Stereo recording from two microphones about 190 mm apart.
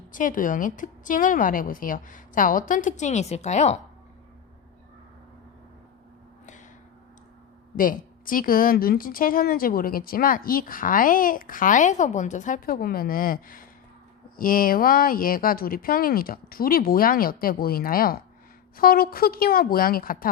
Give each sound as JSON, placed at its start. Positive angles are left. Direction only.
{"t": 0.1, "sound": "a woman's voice", "side_deg": 45}
{"t": 7.8, "sound": "a woman's voice", "side_deg": 45}